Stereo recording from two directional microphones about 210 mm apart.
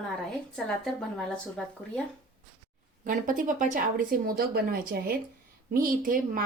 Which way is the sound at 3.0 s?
40° right (ahead or behind).